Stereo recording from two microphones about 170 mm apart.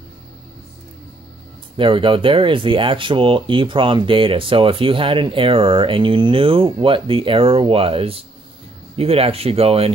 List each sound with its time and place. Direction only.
1.8 s speech: 30° right (ahead or behind)